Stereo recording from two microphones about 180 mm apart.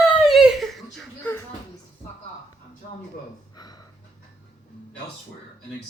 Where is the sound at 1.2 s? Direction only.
10° left (ahead or behind).